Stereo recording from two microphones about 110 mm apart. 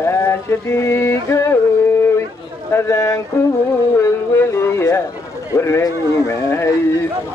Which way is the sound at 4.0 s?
25° left (ahead or behind).